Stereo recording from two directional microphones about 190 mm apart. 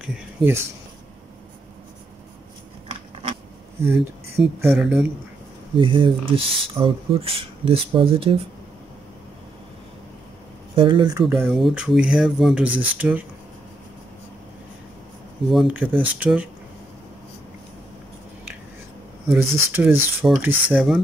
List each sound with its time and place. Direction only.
0.0 s a sound: 5° right (ahead or behind)
2.9 s a sound: 30° right (ahead or behind)
3.8 s speech: centre (ahead or behind)
5.8 s speech: 25° right (ahead or behind)
10.8 s speech: 25° right (ahead or behind)
11.2 s speech: centre (ahead or behind)
15.4 s speech: centre (ahead or behind)
19.3 s speech: 10° right (ahead or behind)